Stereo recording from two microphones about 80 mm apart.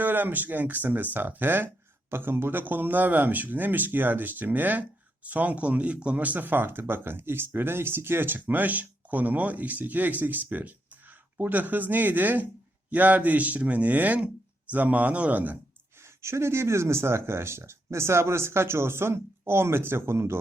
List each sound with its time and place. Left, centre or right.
0.0 s speech: right
16.0 s speech: right